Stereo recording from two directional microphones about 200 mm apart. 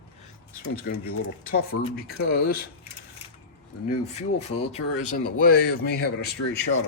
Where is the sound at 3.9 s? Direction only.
35° left (ahead or behind); by 6.3 s 50° left (ahead or behind).